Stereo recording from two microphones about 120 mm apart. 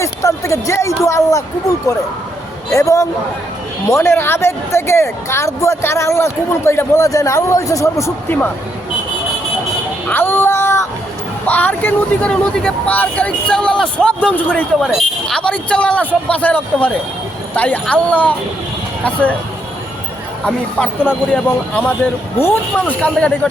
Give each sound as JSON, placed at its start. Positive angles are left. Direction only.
{"t": 0.0, "sound": "a woman's voice", "side_deg": 25}
{"t": 10.1, "sound": "child singing", "side_deg": 20}
{"t": 11.4, "sound": "speech", "side_deg": 15}
{"t": 20.4, "sound": "speech", "side_deg": 10}